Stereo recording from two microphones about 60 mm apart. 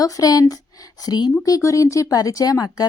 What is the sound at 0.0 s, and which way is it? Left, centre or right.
Speech, left.